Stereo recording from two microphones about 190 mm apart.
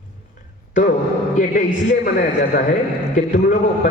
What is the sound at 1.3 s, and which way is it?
A man's voice, 45° left (ahead or behind).